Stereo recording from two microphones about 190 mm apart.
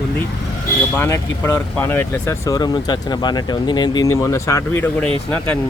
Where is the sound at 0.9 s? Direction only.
10° left (ahead or behind).